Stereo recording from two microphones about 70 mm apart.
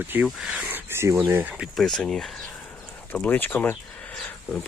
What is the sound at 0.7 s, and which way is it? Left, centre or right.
Speech, right.